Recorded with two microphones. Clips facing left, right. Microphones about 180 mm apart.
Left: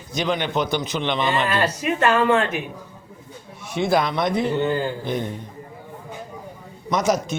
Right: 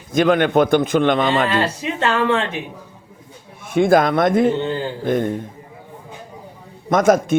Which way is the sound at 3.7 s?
50° right (ahead or behind).